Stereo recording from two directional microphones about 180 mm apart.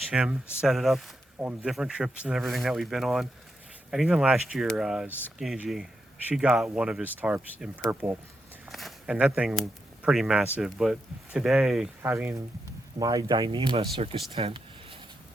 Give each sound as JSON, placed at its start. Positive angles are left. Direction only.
{"t": 0.1, "sound": "speech", "side_deg": -5}
{"t": 5.0, "sound": "speech", "side_deg": 10}
{"t": 5.4, "sound": "speech", "side_deg": 0}
{"t": 8.6, "sound": "speech", "side_deg": 0}
{"t": 12.0, "sound": "speech", "side_deg": -15}
{"t": 14.3, "sound": "a sound", "side_deg": -30}